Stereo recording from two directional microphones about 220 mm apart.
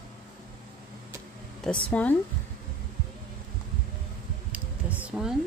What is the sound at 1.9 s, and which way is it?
Speech, 5° left (ahead or behind).